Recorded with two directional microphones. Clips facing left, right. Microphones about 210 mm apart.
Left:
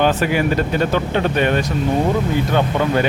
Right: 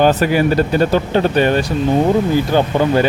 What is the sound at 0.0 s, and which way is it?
Speech, 40° right (ahead or behind).